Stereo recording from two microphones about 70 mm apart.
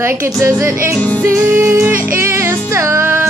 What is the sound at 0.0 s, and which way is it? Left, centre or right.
Music, right.